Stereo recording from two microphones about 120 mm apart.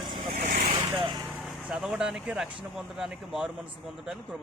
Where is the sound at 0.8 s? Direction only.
35° right (ahead or behind).